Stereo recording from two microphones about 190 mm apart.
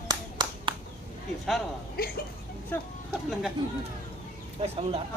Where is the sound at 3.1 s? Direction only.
Centre (ahead or behind).